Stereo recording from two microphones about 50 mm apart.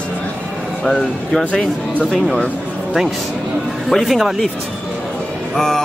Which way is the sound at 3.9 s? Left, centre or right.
Centre.